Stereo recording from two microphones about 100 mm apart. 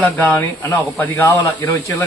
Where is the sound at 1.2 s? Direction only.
30° left (ahead or behind).